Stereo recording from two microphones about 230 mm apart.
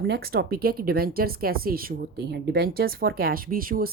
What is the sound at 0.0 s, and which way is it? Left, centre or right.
Speech, right.